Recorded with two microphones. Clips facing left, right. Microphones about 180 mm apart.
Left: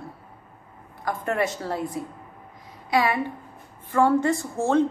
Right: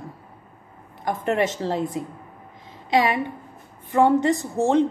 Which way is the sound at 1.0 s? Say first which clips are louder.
Right 3 dB; 20° right (ahead or behind).